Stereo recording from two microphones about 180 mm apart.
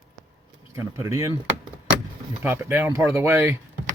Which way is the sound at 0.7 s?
15° right (ahead or behind).